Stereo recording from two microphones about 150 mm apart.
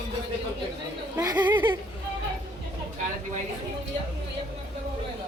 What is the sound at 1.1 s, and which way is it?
Speech, 25° right (ahead or behind).